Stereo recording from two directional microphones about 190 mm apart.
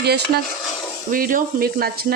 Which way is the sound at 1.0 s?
45° right (ahead or behind).